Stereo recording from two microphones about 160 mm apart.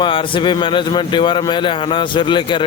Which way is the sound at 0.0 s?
30° left (ahead or behind).